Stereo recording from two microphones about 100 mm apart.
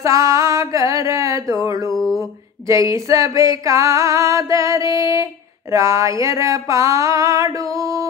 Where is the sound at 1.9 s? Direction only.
5° left (ahead or behind).